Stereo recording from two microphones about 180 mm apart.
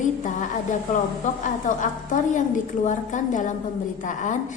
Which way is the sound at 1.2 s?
45° left (ahead or behind).